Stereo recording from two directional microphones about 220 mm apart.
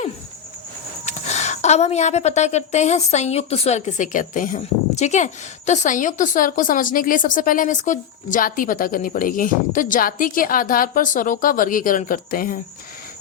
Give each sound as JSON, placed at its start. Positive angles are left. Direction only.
{"t": 1.0, "sound": "a woman's voice", "side_deg": 30}